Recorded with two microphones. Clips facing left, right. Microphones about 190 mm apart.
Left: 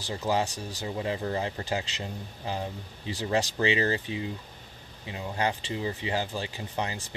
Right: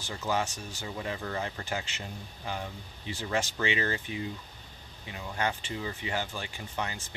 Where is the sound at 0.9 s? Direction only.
25° left (ahead or behind).